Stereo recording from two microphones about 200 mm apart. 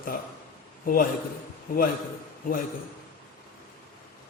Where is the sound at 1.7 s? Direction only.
45° left (ahead or behind).